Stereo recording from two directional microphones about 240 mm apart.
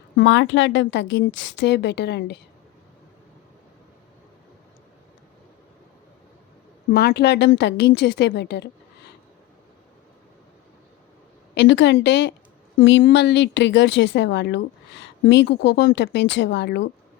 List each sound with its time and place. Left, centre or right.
0.2 s speech: left
6.9 s speech: left
11.5 s speech: left